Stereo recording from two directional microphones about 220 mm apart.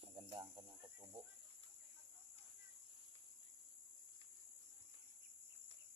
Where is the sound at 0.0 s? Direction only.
20° right (ahead or behind).